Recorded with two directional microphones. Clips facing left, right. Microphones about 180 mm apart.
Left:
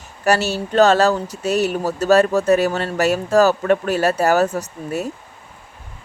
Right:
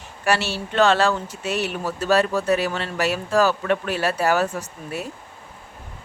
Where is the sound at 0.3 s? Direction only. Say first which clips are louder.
Left 5 dB; 40° left (ahead or behind).